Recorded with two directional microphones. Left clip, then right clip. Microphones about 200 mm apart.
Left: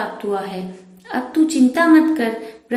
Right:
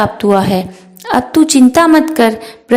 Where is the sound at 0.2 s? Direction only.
45° right (ahead or behind).